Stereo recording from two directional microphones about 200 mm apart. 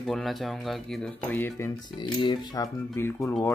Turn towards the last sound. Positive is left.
turn(degrees=10)  # may be behind; listen again after turning